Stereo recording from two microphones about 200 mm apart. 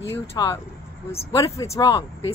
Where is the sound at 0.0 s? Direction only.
10° left (ahead or behind).